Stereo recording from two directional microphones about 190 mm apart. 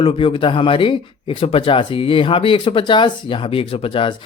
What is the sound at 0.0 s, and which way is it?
Speech, 30° left (ahead or behind).